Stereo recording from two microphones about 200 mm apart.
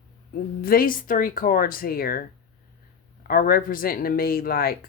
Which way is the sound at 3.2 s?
45° left (ahead or behind).